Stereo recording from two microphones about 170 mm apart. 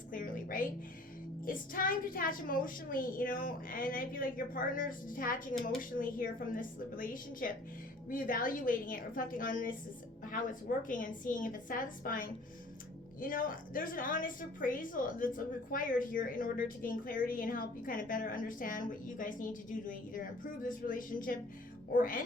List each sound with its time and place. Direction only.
0.1 s music: 50° left (ahead or behind)
1.5 s a woman's voice: 55° left (ahead or behind)